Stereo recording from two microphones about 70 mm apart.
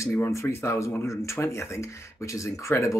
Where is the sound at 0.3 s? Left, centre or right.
Left.